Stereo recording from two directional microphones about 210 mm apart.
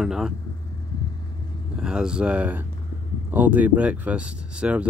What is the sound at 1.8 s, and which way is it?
Speech, 5° right (ahead or behind).